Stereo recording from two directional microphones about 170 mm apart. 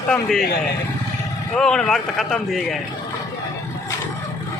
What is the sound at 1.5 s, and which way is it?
Speech, 5° left (ahead or behind).